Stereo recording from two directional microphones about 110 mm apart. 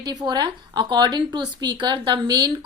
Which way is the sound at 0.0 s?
35° right (ahead or behind).